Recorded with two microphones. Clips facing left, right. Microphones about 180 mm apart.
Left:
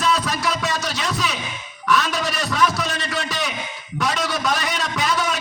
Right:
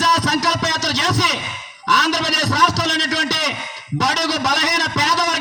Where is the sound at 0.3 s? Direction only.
80° right.